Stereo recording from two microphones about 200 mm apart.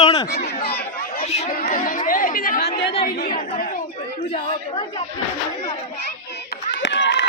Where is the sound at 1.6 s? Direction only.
40° left (ahead or behind).